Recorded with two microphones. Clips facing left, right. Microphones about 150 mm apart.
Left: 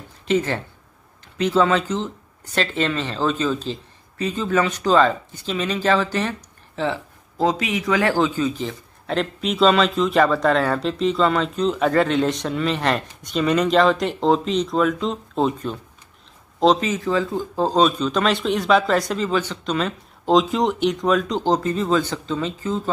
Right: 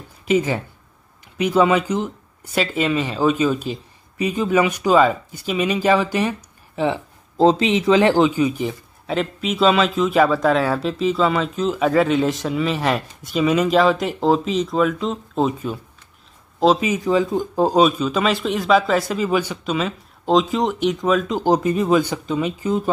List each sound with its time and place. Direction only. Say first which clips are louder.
0.3 s speech: right 2 dB; 10° right (ahead or behind)
7.3 s speech: right 6 dB; 30° right (ahead or behind)
9.0 s speech: right 1 dB; centre (ahead or behind)